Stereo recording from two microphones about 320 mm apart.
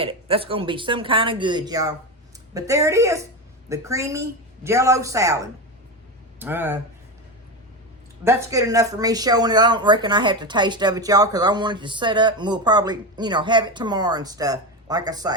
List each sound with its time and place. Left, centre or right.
0.0 s speech: centre
8.2 s speech: centre